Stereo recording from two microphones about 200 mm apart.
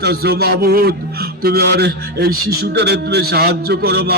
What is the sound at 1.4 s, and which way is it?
A man's voice, 55° right (ahead or behind).